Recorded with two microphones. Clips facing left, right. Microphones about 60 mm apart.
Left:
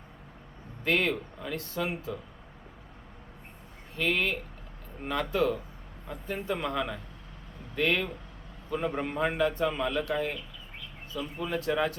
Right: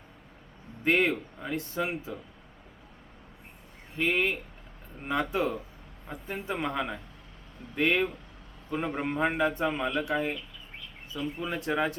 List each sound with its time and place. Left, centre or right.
0.9 s a man's voice: right
3.9 s a man's voice: centre